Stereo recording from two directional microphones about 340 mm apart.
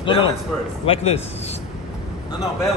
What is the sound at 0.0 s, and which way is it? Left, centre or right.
A man's voice, centre.